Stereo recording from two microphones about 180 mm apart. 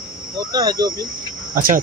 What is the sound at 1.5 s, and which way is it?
Speech, 50° right (ahead or behind).